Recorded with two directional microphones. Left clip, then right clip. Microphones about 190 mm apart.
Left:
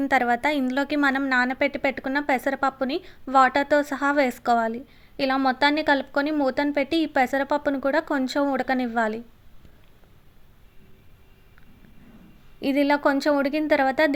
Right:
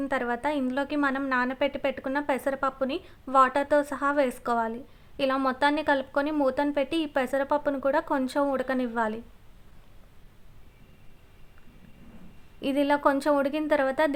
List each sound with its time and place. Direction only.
0.0 s a woman's voice: 15° left (ahead or behind)
12.6 s a woman's voice: 10° left (ahead or behind)